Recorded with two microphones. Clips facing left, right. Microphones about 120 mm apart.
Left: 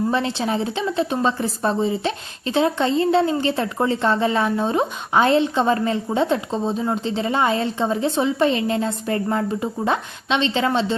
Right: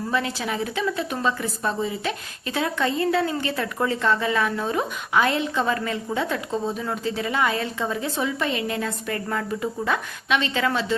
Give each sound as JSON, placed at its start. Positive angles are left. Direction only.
{"t": 0.1, "sound": "a woman's voice", "side_deg": 30}